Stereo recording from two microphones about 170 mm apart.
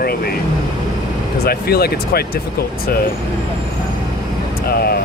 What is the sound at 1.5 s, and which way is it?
Speech, 65° left (ahead or behind).